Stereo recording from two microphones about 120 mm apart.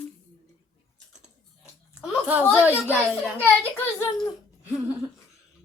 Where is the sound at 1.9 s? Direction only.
10° right (ahead or behind).